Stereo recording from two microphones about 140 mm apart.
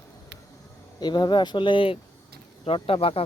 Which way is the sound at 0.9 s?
30° left (ahead or behind).